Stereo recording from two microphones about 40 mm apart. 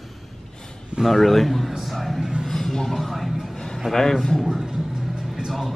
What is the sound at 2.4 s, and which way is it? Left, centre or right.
Music, centre.